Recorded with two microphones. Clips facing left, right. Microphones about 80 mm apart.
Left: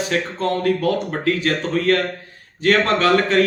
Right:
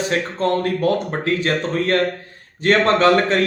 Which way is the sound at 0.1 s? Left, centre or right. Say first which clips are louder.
Right 2 dB; right.